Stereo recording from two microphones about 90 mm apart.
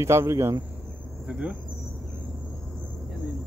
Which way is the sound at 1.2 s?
15° right (ahead or behind).